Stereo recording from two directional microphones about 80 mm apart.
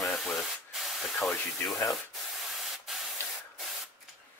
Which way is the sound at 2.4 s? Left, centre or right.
Centre.